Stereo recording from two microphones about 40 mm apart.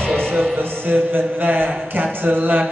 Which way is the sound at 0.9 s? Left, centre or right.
Right.